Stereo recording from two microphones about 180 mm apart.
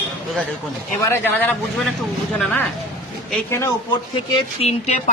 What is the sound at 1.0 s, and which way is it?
Speech, 10° left (ahead or behind).